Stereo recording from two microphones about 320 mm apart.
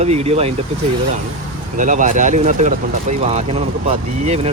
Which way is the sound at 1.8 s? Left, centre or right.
Right.